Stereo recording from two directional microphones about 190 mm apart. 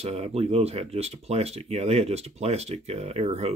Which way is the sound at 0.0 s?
35° right (ahead or behind).